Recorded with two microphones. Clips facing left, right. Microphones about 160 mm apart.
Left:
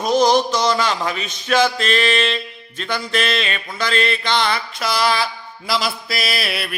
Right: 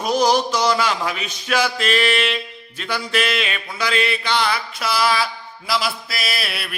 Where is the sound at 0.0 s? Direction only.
10° right (ahead or behind).